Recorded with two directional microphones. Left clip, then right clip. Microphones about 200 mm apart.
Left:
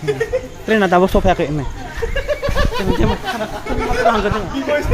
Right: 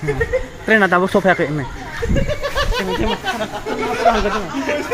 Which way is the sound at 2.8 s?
10° left (ahead or behind).